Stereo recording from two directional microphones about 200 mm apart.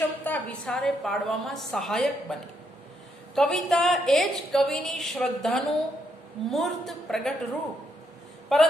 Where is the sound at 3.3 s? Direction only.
Centre (ahead or behind).